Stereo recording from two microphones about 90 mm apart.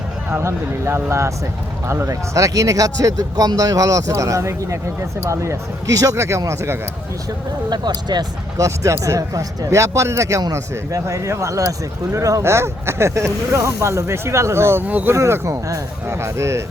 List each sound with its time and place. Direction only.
0.3 s speech: 25° right (ahead or behind)
7.7 s speech: 50° right (ahead or behind)
8.5 s speech: 35° right (ahead or behind)
14.8 s speech: 20° right (ahead or behind)
15.1 s speech: 35° right (ahead or behind)